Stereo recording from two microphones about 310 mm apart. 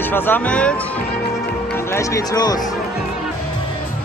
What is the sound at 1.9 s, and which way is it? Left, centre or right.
Speech, centre.